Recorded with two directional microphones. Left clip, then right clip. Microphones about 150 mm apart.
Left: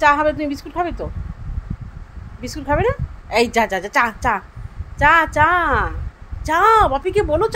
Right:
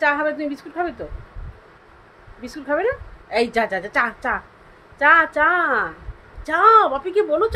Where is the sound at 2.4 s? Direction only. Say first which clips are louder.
Left 3 dB; 15° left (ahead or behind).